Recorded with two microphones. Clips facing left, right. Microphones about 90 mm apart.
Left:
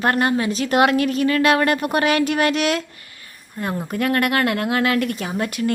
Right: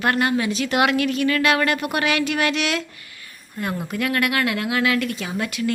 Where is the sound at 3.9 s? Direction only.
40° left (ahead or behind).